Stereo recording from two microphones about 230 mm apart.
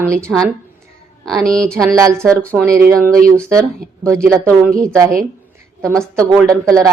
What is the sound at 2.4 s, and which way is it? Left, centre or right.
Speech, centre.